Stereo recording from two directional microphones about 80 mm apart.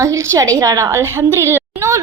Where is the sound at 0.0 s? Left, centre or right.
Right.